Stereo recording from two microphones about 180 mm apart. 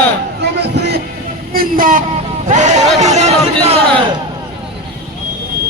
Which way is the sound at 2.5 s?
40° right (ahead or behind).